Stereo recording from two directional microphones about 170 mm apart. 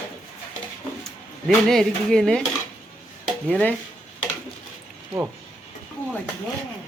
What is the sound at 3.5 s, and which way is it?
Speech, 10° left (ahead or behind).